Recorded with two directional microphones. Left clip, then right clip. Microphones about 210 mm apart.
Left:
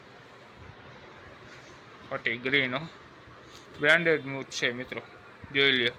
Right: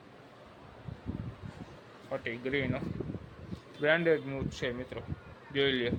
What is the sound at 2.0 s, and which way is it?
Speech, 5° right (ahead or behind).